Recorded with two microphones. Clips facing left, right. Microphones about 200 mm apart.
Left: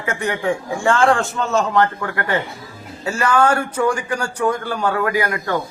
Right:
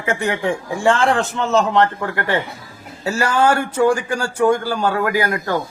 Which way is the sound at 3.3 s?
25° right (ahead or behind).